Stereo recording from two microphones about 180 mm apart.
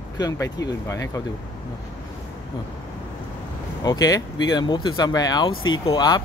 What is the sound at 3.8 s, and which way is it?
A man's voice, 20° left (ahead or behind).